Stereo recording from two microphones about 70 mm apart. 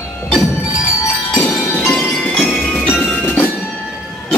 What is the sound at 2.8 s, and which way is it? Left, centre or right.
Music, left.